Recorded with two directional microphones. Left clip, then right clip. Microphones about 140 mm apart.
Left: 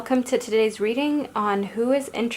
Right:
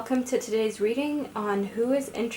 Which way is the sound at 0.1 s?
30° left (ahead or behind).